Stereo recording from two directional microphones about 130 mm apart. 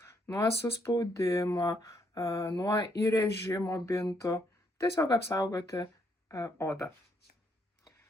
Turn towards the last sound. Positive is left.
turn(degrees=20)  # may be behind; listen again after turning